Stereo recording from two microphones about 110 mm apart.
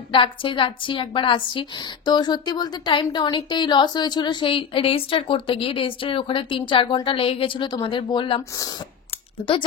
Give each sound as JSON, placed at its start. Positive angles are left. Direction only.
{"t": 0.1, "sound": "a woman's voice", "side_deg": 50}